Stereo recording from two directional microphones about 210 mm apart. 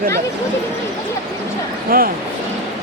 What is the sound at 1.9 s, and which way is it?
Speech, 45° right (ahead or behind).